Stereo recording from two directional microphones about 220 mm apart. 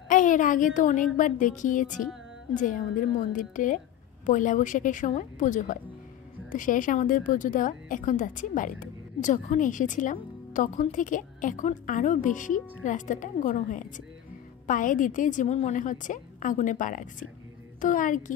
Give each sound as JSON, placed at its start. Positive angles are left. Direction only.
{"t": 0.1, "sound": "a woman's voice", "side_deg": 35}